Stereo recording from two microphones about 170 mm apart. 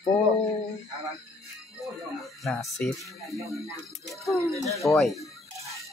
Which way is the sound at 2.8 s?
Centre (ahead or behind).